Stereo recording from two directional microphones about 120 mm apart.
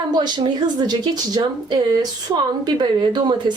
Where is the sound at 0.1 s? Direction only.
35° right (ahead or behind).